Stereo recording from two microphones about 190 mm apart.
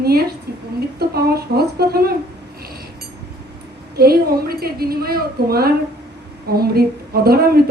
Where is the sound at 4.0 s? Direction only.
55° right (ahead or behind).